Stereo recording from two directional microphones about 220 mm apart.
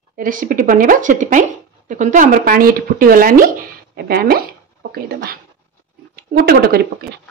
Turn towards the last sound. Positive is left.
turn(degrees=-45)  # may be behind; listen again after turning